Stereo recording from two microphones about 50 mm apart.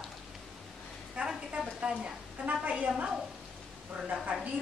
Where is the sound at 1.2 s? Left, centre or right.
Right.